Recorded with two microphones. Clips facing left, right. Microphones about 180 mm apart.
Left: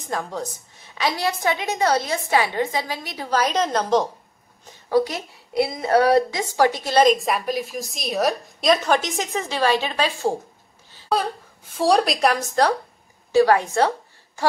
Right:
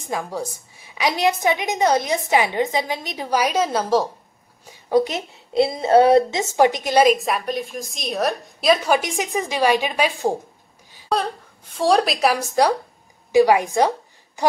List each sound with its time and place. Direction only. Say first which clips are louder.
0.1 s a woman's voice: right 1 dB; 10° right (ahead or behind)
4.6 s a woman's voice: right 1 dB; 20° right (ahead or behind)
11.1 s a woman's voice: even; centre (ahead or behind); by 14.4 s 15° right (ahead or behind)